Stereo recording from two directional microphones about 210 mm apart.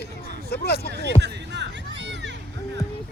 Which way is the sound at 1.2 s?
55° right (ahead or behind).